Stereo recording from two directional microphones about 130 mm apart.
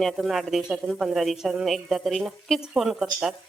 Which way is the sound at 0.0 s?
Centre (ahead or behind).